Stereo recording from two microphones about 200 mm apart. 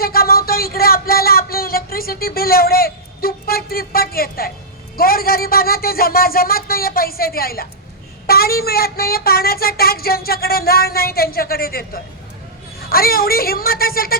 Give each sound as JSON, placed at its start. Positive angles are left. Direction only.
{"t": 0.0, "sound": "speech", "side_deg": 50}